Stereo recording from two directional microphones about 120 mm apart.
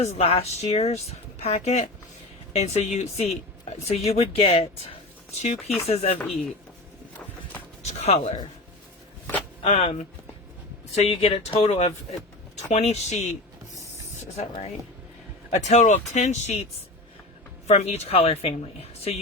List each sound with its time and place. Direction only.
0.0 s speech: 65° left (ahead or behind)
5.4 s speech: 70° left (ahead or behind)
7.9 s speech: 60° left (ahead or behind)
9.6 s speech: 60° left (ahead or behind)
14.3 s speech: 65° left (ahead or behind)
17.7 s speech: 60° left (ahead or behind)